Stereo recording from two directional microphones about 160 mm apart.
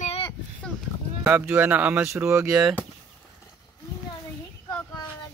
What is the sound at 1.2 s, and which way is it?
Speech, 10° right (ahead or behind).